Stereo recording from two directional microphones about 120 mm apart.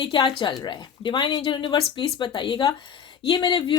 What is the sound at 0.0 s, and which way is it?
Speech, 40° left (ahead or behind).